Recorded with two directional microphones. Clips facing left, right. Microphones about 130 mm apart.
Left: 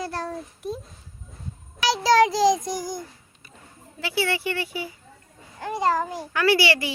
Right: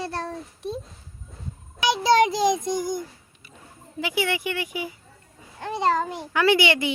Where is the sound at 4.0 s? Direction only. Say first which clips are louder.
Even; 15° right (ahead or behind).